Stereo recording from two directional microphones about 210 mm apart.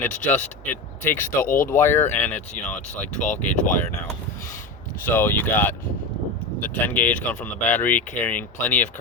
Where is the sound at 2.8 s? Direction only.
35° left (ahead or behind).